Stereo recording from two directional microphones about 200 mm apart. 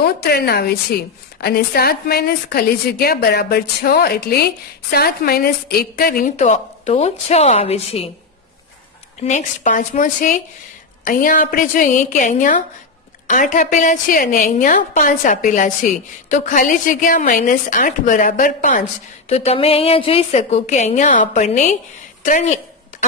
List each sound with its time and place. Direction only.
0.0 s a woman's voice: 50° left (ahead or behind); by 8.1 s 30° left (ahead or behind)
9.2 s a woman's voice: 40° left (ahead or behind)